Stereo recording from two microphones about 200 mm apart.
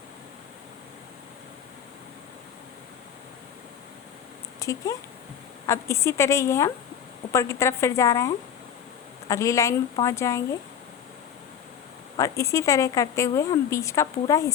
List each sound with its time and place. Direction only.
4.6 s speech: 15° left (ahead or behind)
9.3 s speech: 15° left (ahead or behind)
12.1 s speech: 15° left (ahead or behind)